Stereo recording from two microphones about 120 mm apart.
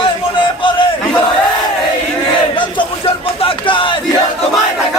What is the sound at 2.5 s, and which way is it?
Music, 45° left (ahead or behind).